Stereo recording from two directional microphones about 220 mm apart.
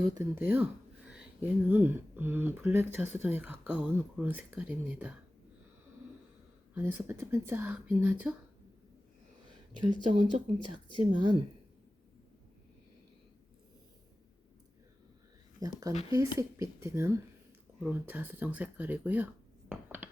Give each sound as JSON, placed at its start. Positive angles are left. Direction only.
{"t": 0.1, "sound": "speech", "side_deg": -10}
{"t": 6.7, "sound": "speech", "side_deg": -10}
{"t": 10.1, "sound": "speech", "side_deg": -35}
{"t": 10.9, "sound": "speech", "side_deg": -20}
{"t": 15.6, "sound": "speech", "side_deg": -15}